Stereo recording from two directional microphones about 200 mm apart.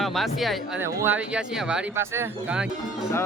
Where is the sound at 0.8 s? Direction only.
10° right (ahead or behind).